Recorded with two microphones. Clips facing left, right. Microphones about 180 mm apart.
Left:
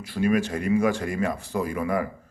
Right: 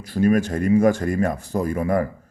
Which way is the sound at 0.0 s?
45° right (ahead or behind).